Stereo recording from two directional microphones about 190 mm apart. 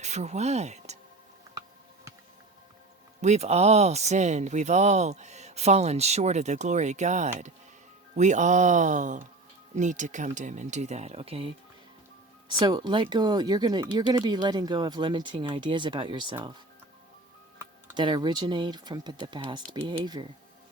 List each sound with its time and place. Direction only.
0.0 s speech: 35° right (ahead or behind)
3.2 s speech: 35° right (ahead or behind)
17.9 s speech: 20° right (ahead or behind)